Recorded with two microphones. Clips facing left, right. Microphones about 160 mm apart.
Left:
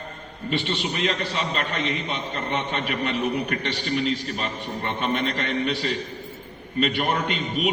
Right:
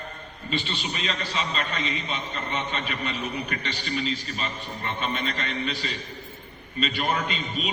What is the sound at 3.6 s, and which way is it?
A man's voice, 65° left (ahead or behind).